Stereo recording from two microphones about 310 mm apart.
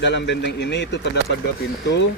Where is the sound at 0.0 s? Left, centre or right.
Left.